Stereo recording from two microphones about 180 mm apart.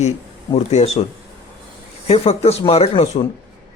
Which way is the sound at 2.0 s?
35° left (ahead or behind).